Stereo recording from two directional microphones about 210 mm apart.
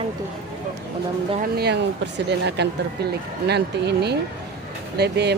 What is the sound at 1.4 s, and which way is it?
Speech, 50° right (ahead or behind).